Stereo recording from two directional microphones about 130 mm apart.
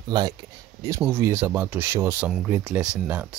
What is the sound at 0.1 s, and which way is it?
Speech, 35° right (ahead or behind).